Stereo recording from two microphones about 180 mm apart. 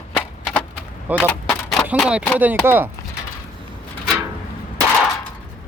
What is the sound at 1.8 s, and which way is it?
Speech, 5° right (ahead or behind).